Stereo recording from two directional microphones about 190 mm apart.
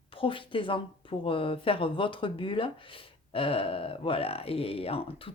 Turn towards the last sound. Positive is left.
turn(degrees=30)  # may be behind; listen again after turning